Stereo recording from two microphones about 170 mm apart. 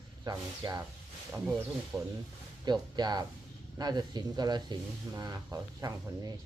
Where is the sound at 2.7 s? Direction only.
25° right (ahead or behind).